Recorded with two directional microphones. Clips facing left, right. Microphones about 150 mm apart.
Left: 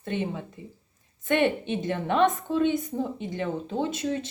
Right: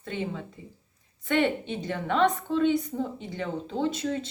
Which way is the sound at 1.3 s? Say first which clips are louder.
Left 2 dB; 15° left (ahead or behind).